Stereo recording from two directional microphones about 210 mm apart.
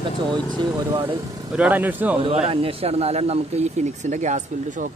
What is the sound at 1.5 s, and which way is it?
Speech, 5° right (ahead or behind).